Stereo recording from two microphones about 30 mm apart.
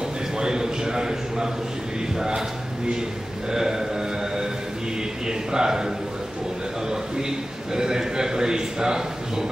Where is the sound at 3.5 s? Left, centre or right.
Centre.